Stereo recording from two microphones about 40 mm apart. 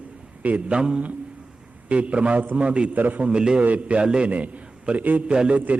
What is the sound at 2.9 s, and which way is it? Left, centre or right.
Speech, right.